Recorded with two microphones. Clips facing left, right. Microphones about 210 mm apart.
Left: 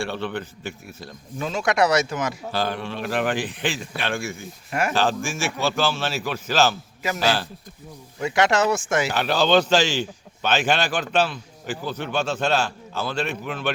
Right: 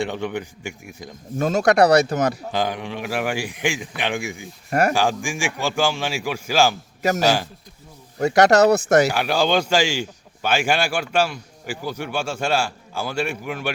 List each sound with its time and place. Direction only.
0.0 s a man's voice: 15° right (ahead or behind)
1.4 s speech: 45° right (ahead or behind)
2.5 s a man's voice: 15° right (ahead or behind)
4.7 s speech: 45° right (ahead or behind)
4.9 s a man's voice: 15° right (ahead or behind)
8.2 s speech: 40° right (ahead or behind)
9.1 s a man's voice: 10° right (ahead or behind)